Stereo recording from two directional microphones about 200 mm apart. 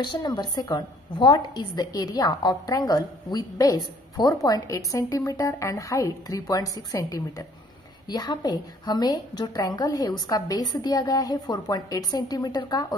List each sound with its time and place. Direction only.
0.0 s a woman's voice: 20° left (ahead or behind)